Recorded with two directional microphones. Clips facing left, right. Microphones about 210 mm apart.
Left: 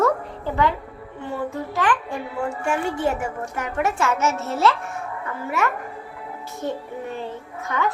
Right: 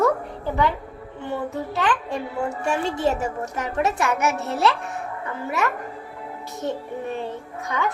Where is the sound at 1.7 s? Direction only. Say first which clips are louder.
Left 1 dB; 20° right (ahead or behind).